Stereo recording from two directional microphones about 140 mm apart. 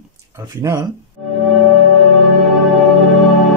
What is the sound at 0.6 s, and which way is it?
Speech, 20° right (ahead or behind).